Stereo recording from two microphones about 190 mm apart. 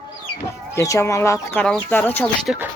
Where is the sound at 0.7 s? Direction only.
15° left (ahead or behind).